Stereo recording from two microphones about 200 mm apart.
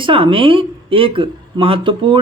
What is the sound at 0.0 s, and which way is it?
Speech, 25° right (ahead or behind).